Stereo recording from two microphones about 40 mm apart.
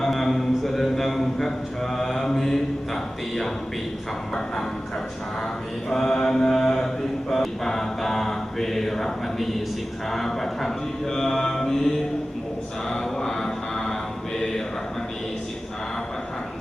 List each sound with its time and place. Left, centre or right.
0.0 s a man's voice: centre
5.9 s mantra: centre